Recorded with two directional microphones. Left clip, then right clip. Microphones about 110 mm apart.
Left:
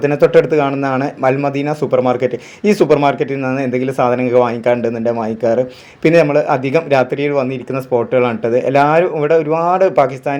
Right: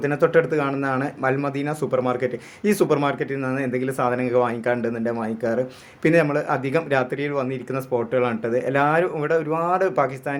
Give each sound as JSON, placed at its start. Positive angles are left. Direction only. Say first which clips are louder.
{"t": 0.0, "sound": "speech", "louder": "left 8 dB", "side_deg": 25}